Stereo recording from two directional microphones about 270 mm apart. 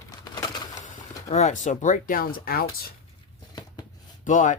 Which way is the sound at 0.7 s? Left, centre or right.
Left.